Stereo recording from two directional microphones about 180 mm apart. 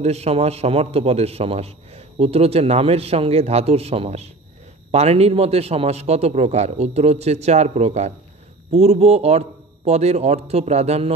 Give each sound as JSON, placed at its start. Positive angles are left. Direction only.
{"t": 0.0, "sound": "a man's voice", "side_deg": -35}